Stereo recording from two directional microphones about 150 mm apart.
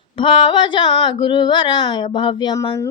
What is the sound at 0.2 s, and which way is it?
Speech, 35° left (ahead or behind).